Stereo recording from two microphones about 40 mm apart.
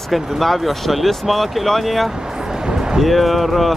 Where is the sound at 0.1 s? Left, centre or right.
Centre.